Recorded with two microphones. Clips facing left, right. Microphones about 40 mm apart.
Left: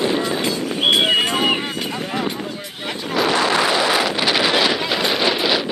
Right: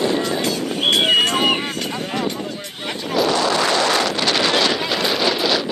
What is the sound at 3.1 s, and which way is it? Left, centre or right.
Wind noise, centre.